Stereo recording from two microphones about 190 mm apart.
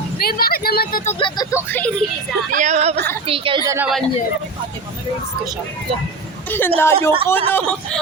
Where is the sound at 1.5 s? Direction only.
10° left (ahead or behind).